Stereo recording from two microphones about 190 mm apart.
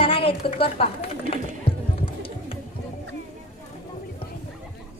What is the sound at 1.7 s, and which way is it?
Music, 30° left (ahead or behind).